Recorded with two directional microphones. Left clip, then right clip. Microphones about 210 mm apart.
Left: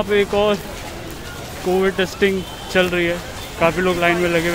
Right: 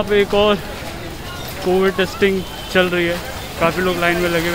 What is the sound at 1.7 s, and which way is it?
Speech, 5° left (ahead or behind).